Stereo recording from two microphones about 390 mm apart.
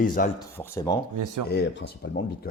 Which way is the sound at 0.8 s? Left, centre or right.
Centre.